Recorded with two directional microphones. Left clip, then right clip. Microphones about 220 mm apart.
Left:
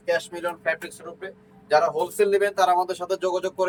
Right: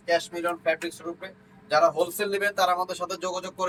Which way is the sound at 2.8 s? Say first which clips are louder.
Left 4 dB; 10° left (ahead or behind).